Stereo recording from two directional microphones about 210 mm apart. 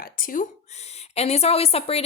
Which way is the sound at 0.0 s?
40° left (ahead or behind).